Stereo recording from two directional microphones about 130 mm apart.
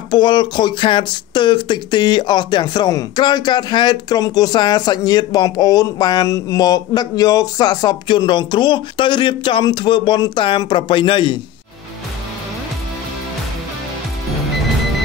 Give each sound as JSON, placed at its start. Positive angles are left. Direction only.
{"t": 0.1, "sound": "speech", "side_deg": 35}